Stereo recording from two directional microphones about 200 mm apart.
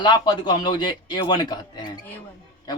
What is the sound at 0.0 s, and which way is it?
A man's voice, 20° left (ahead or behind).